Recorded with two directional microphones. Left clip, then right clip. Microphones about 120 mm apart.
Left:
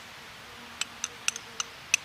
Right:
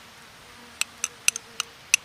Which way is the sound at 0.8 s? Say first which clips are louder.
Right 6 dB; 20° right (ahead or behind).